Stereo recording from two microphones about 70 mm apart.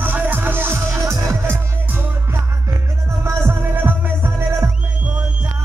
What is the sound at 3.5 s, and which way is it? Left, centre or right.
Music, right.